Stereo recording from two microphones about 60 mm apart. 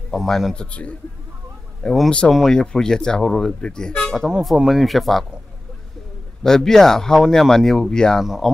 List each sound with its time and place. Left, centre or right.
0.1 s speech: centre
0.6 s a man's voice: left
2.0 s speech: centre
4.6 s speech: centre
6.4 s speech: centre
8.2 s speech: centre